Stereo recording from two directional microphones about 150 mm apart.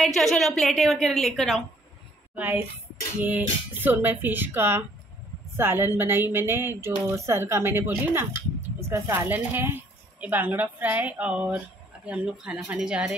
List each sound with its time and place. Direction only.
0.0 s a woman's voice: centre (ahead or behind)
2.3 s a woman's voice: 10° right (ahead or behind)